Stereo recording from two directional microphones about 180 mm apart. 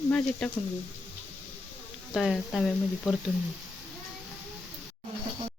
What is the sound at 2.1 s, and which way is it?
Speech, centre (ahead or behind).